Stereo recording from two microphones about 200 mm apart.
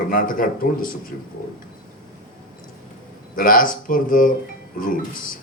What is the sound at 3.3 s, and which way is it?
A man's voice, 45° left (ahead or behind).